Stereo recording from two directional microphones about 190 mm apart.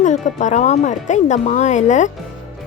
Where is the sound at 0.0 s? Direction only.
40° left (ahead or behind).